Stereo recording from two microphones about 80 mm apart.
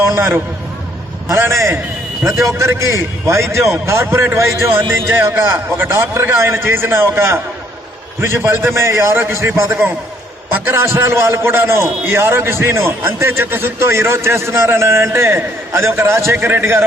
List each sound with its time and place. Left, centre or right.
0.0 s a man's voice: right
2.2 s a man's voice: centre
2.5 s a man's voice: right
4.0 s a man's voice: right